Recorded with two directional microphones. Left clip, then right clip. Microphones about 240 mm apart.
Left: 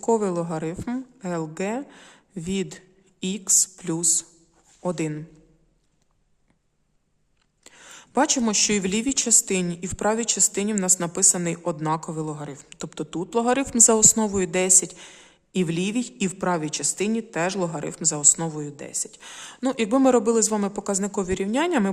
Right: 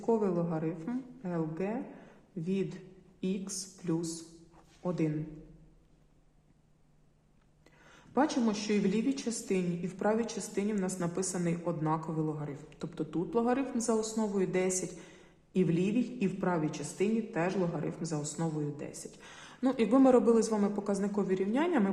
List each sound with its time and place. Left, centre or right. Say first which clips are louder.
0.0 s speech: left 8 dB; left
7.6 s speech: left 12 dB; left